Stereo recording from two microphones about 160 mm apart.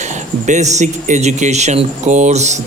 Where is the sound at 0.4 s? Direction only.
45° right (ahead or behind).